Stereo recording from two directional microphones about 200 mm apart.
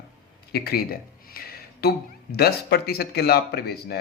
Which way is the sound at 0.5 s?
50° left (ahead or behind).